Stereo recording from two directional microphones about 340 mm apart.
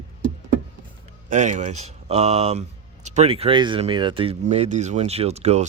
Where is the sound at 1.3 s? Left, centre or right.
Right.